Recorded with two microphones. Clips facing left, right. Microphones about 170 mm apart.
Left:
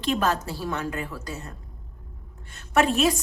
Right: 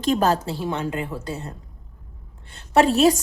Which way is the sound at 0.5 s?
25° right (ahead or behind).